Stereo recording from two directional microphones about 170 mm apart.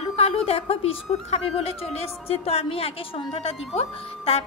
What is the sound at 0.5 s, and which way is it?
A woman's voice, 35° left (ahead or behind).